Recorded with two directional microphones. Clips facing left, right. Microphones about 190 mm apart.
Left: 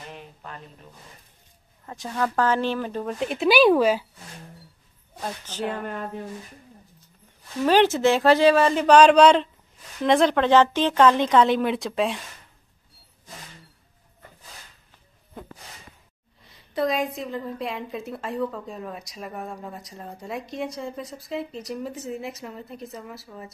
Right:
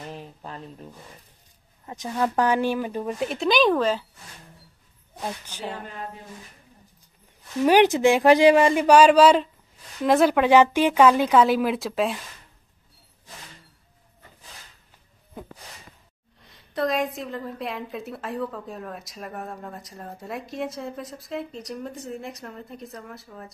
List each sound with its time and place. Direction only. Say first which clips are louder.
0.1 s a sound: right 3 dB; 35° right (ahead or behind)
1.9 s speech: right 1 dB; 20° right (ahead or behind); by 4.0 s 10° left (ahead or behind)
5.2 s speech: left 2 dB; 10° right (ahead or behind)
5.7 s speech: left 2 dB; 55° left (ahead or behind)
7.6 s speech: right 1 dB; 15° right (ahead or behind)
16.4 s a woman's voice: left 1 dB; centre (ahead or behind)